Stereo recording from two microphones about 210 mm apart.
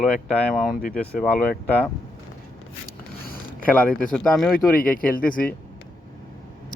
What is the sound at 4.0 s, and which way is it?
Speech, 5° left (ahead or behind).